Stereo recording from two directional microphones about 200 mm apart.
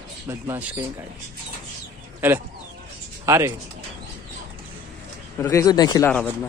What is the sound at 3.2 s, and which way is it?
Speech, 15° right (ahead or behind).